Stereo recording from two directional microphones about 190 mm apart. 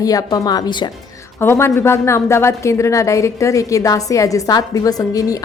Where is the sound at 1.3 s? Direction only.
15° left (ahead or behind).